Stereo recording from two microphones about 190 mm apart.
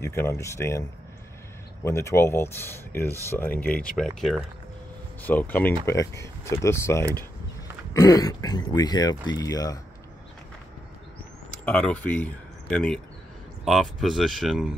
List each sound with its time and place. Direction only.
0.0 s speech: 15° left (ahead or behind)
1.9 s speech: 15° left (ahead or behind)
11.6 s speech: 5° left (ahead or behind)